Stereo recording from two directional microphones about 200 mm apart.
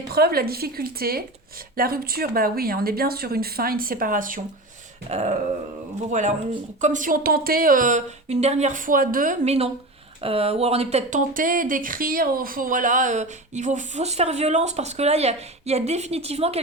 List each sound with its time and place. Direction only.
0.1 s speech: 50° right (ahead or behind); by 16.6 s 30° right (ahead or behind)